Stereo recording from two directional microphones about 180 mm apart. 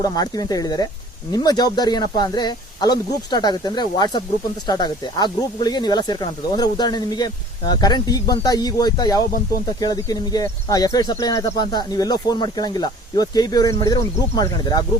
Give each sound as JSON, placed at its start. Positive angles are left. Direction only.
{"t": 0.0, "sound": "speech", "side_deg": 20}